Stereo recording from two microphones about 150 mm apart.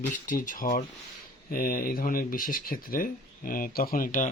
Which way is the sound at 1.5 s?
75° left (ahead or behind).